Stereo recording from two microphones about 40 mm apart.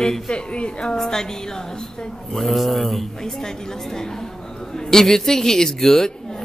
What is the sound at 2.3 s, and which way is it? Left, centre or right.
Speech, centre.